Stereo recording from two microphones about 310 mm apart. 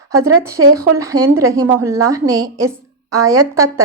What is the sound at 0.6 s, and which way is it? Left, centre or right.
Speech, right.